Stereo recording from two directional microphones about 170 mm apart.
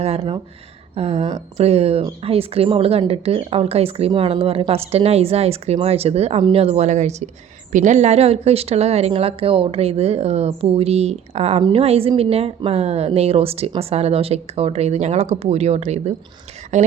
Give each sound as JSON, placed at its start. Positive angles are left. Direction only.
{"t": 0.9, "sound": "speech", "side_deg": -35}